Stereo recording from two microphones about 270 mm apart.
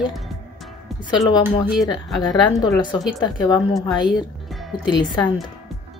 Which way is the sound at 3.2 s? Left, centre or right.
Centre.